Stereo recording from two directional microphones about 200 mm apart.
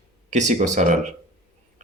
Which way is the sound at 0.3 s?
35° right (ahead or behind).